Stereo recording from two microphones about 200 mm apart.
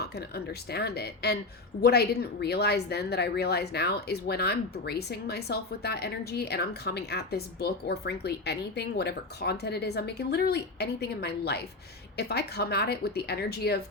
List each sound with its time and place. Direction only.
0.0 s a woman's voice: 50° left (ahead or behind)